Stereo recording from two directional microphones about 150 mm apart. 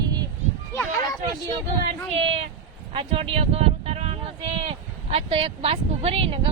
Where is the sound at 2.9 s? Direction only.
40° right (ahead or behind).